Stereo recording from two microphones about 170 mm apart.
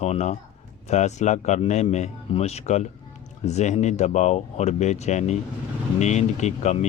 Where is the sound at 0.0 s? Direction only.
40° left (ahead or behind).